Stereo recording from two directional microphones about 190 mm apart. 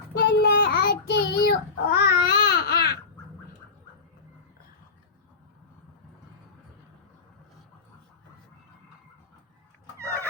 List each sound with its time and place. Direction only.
0.2 s child singing: 60° left (ahead or behind)